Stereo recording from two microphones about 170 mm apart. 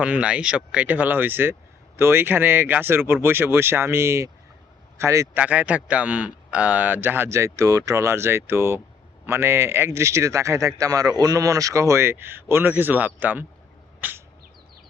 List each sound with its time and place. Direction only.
0.0 s a man's voice: 5° right (ahead or behind)